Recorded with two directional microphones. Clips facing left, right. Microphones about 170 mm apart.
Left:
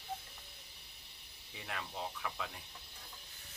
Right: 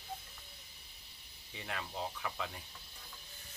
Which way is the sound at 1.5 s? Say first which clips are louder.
Right 2 dB; centre (ahead or behind).